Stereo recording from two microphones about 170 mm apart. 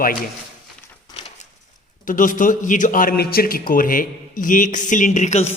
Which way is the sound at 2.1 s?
50° left (ahead or behind).